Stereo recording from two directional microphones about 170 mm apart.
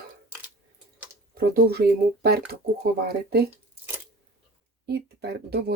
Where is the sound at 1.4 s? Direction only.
65° right (ahead or behind).